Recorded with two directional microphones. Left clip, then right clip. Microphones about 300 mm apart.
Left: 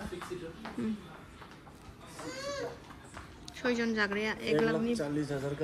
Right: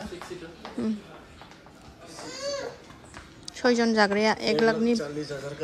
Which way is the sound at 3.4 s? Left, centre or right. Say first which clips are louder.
Right 9 dB; centre.